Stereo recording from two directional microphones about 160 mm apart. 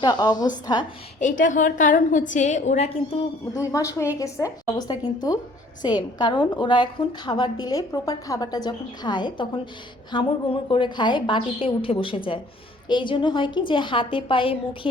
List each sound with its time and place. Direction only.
0.0 s a woman's voice: 25° left (ahead or behind)
1.2 s a woman's voice: 50° left (ahead or behind)
3.5 s a woman's voice: 20° left (ahead or behind)